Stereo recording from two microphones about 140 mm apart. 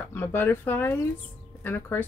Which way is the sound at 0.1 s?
15° left (ahead or behind).